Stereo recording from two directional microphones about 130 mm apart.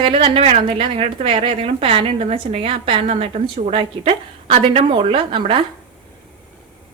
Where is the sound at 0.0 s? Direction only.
45° right (ahead or behind).